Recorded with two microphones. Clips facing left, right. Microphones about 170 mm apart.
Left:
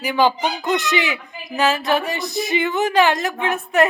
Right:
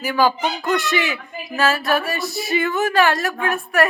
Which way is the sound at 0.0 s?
20° left (ahead or behind).